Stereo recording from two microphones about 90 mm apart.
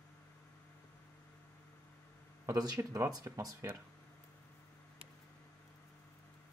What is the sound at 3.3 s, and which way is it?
Speech, 35° right (ahead or behind).